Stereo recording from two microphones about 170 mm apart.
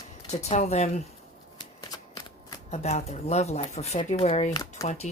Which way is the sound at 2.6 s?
40° left (ahead or behind).